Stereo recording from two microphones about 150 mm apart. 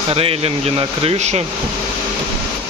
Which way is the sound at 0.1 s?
40° right (ahead or behind).